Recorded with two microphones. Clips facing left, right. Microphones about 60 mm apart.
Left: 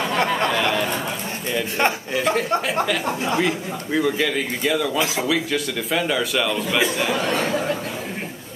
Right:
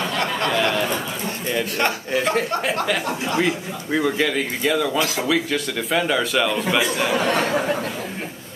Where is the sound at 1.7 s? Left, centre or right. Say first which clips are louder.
Left 4 dB; centre.